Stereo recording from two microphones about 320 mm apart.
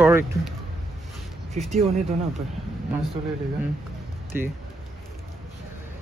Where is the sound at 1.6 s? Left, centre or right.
Right.